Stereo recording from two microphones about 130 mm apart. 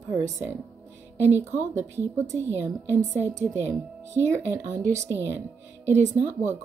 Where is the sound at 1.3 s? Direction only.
20° right (ahead or behind).